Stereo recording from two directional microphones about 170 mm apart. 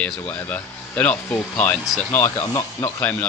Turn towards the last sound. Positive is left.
turn(degrees=10)  # may be behind; listen again after turning